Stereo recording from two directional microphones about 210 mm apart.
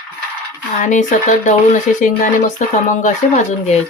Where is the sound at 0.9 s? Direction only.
35° left (ahead or behind).